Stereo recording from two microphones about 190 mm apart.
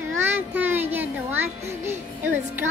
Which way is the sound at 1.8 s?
10° right (ahead or behind).